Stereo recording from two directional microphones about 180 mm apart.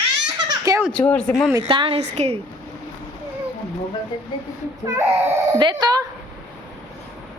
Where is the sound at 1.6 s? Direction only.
30° right (ahead or behind).